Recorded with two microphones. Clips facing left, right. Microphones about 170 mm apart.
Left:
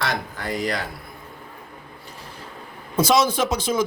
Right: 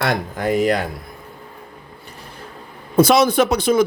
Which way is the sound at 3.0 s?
60° right (ahead or behind).